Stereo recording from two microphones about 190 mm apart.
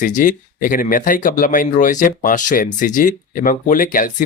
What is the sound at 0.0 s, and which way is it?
Speech, 45° left (ahead or behind).